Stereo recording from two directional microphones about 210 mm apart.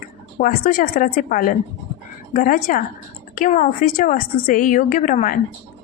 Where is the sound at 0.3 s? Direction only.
40° left (ahead or behind).